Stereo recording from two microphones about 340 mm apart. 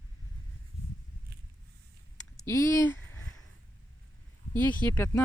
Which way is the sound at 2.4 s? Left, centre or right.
Centre.